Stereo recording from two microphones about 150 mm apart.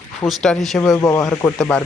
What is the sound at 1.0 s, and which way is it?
Speech, 20° left (ahead or behind).